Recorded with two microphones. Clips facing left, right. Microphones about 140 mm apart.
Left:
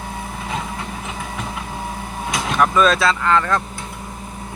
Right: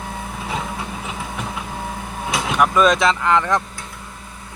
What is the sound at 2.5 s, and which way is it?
Speech, 15° right (ahead or behind).